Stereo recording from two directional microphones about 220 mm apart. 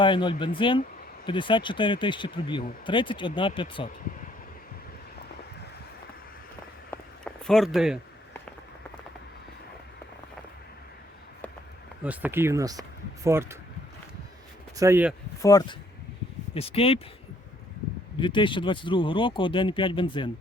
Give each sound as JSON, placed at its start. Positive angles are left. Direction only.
{"t": 0.0, "sound": "speech", "side_deg": 20}
{"t": 6.9, "sound": "a sound", "side_deg": 5}
{"t": 12.0, "sound": "speech", "side_deg": -5}
{"t": 14.8, "sound": "speech", "side_deg": -10}
{"t": 15.4, "sound": "speech", "side_deg": 15}
{"t": 16.6, "sound": "speech", "side_deg": 25}
{"t": 18.2, "sound": "speech", "side_deg": 20}